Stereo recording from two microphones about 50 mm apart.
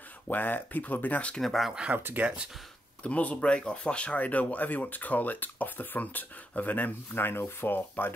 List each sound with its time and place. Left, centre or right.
0.3 s speech: left
1.4 s speech: centre
1.9 s speech: right
2.2 s speech: centre
3.0 s speech: left
7.2 s rub: left